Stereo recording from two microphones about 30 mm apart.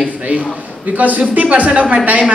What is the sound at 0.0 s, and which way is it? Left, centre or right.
A woman's voice, right.